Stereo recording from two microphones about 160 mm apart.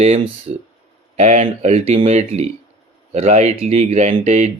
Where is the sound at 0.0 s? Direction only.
40° right (ahead or behind).